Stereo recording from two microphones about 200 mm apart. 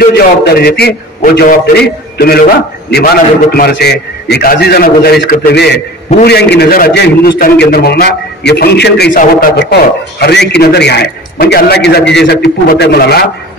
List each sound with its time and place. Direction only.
0.0 s a man's voice: 50° left (ahead or behind)
3.5 s a man's voice: 55° left (ahead or behind)